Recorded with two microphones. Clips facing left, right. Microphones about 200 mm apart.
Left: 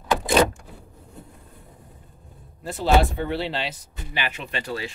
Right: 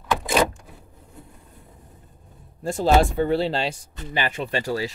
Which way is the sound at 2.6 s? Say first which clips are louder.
Right 2 dB; 45° right (ahead or behind).